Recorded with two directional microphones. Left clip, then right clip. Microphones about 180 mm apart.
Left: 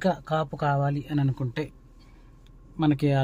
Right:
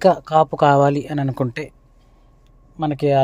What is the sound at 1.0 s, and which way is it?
Speech, 30° right (ahead or behind).